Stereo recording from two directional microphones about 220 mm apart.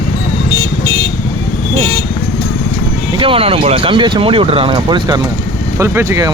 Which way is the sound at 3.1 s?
25° right (ahead or behind).